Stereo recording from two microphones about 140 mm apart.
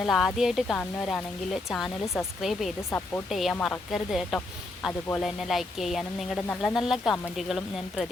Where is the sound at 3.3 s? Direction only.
Centre (ahead or behind).